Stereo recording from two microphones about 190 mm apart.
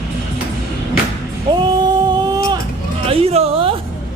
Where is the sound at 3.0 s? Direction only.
30° right (ahead or behind).